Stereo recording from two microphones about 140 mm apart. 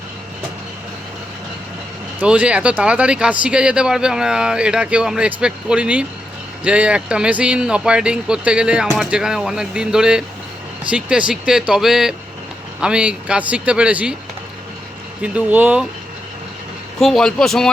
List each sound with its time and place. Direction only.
2.1 s speech: 10° right (ahead or behind)
15.2 s speech: 10° right (ahead or behind)
17.0 s speech: centre (ahead or behind)